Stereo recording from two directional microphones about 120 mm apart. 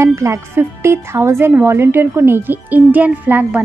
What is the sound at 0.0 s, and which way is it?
A woman's voice, 25° right (ahead or behind).